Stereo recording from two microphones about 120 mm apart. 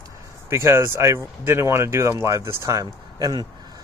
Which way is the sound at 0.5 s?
20° right (ahead or behind).